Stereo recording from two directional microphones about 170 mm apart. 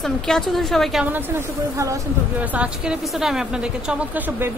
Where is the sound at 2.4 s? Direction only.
10° right (ahead or behind).